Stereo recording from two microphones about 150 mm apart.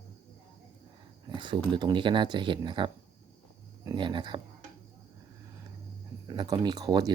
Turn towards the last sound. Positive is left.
turn(degrees=-25)  # may be behind; listen again after turning